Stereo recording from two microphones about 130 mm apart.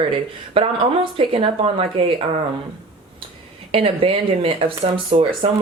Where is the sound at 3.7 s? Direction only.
45° right (ahead or behind).